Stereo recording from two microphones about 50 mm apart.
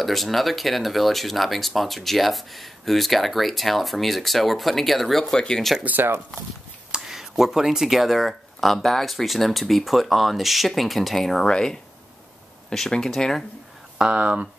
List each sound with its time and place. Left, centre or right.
0.0 s speech: centre
5.9 s speech: right
6.9 s speech: centre
12.6 s a sound: centre
12.9 s speech: centre
13.9 s speech: right